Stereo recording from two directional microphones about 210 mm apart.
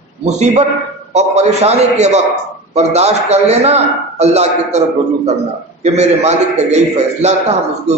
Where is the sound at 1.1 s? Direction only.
30° right (ahead or behind).